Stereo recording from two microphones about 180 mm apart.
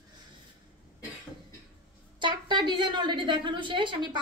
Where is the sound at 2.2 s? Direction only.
25° right (ahead or behind).